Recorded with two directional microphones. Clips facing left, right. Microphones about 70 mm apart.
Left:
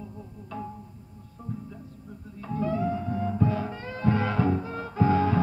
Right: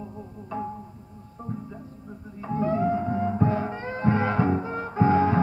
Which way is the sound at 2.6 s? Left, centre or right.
Right.